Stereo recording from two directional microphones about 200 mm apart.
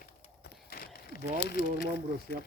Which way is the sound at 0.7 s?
50° left (ahead or behind).